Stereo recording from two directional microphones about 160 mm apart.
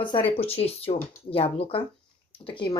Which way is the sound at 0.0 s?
30° left (ahead or behind).